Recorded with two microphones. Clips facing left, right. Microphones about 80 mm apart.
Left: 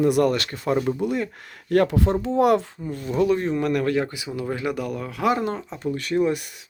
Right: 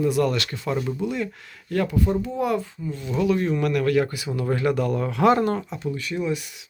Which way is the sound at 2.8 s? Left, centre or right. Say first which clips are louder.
Left 1 dB; left.